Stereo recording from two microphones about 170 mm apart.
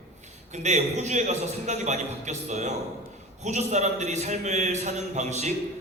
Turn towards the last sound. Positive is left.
turn(degrees=-45)  # may be behind; listen again after turning